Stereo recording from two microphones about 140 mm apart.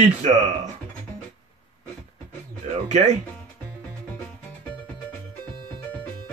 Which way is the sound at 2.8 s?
55° right (ahead or behind).